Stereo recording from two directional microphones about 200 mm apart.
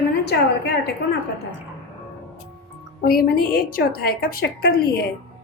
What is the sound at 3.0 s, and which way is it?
A woman's voice, 45° left (ahead or behind).